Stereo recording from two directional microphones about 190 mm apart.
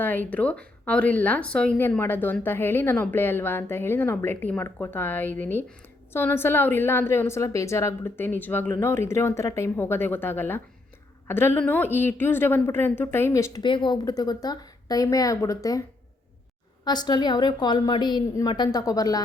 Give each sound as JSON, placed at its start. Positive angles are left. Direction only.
{"t": 0.0, "sound": "speech", "side_deg": 10}
{"t": 16.8, "sound": "a woman's voice", "side_deg": 20}